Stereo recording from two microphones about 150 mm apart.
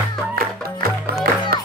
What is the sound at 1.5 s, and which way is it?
Music, 90° right.